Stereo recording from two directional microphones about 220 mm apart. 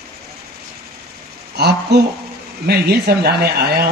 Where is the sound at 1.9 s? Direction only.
50° right (ahead or behind).